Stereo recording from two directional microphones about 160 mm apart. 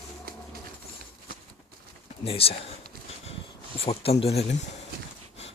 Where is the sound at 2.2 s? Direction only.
35° left (ahead or behind).